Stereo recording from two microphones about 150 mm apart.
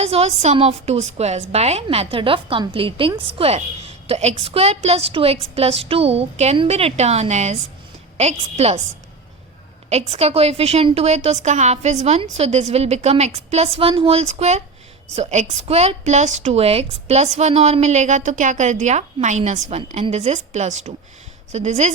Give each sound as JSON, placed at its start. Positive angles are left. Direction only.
{"t": 0.0, "sound": "a woman's voice", "side_deg": -45}
{"t": 9.9, "sound": "a woman's voice", "side_deg": -45}